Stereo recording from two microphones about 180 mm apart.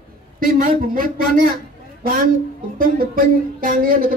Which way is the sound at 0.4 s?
50° right (ahead or behind).